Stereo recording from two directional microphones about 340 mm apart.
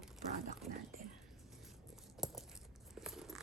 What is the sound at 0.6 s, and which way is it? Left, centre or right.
Speech, centre.